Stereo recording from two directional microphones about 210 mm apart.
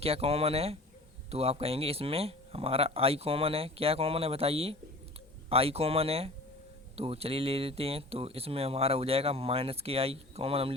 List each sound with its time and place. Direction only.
0.0 s speech: 30° right (ahead or behind)